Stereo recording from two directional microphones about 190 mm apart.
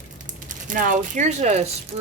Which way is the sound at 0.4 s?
45° right (ahead or behind).